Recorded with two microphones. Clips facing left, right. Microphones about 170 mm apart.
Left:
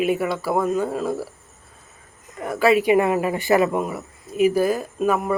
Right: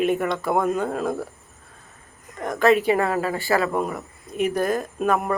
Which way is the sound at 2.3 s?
5° left (ahead or behind).